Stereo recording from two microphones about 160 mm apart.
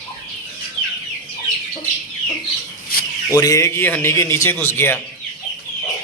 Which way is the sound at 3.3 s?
20° left (ahead or behind).